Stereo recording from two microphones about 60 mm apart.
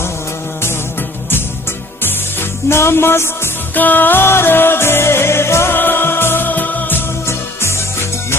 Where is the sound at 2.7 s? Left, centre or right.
Left.